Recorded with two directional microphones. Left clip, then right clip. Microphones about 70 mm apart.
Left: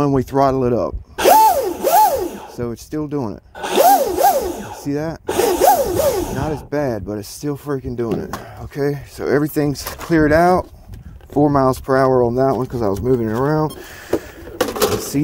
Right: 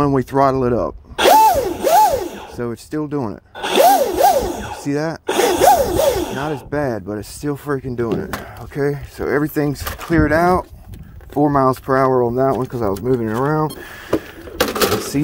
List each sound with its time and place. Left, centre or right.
0.0 s speech: left
1.3 s music: centre
2.2 s speech: left
3.6 s a sound: centre
4.8 s speech: left
5.2 s a sound: centre
6.7 s speech: left
8.7 s speech: left